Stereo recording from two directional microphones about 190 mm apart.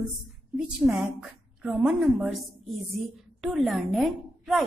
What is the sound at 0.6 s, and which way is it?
A woman's voice, centre (ahead or behind).